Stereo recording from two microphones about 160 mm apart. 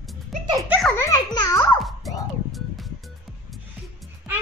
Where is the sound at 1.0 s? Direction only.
20° left (ahead or behind).